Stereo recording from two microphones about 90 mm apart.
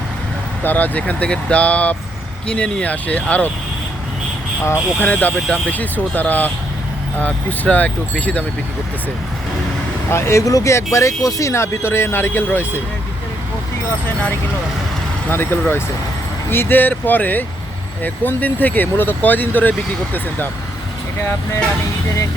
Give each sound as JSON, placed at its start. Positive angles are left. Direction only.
{"t": 0.6, "sound": "speech", "side_deg": 20}
{"t": 5.0, "sound": "speech", "side_deg": 20}
{"t": 10.1, "sound": "speech", "side_deg": 30}
{"t": 15.3, "sound": "speech", "side_deg": 25}